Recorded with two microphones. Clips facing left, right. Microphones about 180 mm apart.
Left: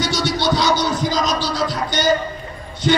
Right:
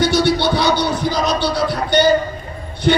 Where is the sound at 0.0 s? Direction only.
60° right (ahead or behind).